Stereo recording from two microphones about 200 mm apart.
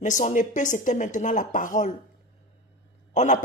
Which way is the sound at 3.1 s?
35° left (ahead or behind).